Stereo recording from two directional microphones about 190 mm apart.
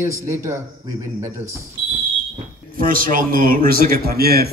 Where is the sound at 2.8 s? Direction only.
50° right (ahead or behind).